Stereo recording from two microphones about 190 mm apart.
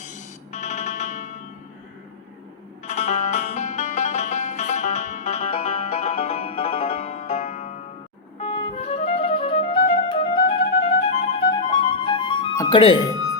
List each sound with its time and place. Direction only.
0.0 s music: 40° left (ahead or behind)
2.8 s music: 35° left (ahead or behind)